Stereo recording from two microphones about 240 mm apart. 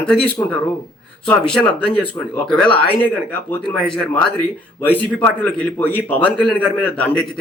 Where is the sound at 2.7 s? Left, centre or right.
Left.